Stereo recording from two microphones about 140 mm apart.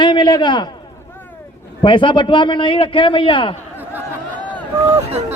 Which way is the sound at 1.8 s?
35° left (ahead or behind).